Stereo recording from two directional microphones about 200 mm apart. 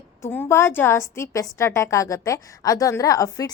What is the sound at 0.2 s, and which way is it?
A woman's voice, 10° left (ahead or behind).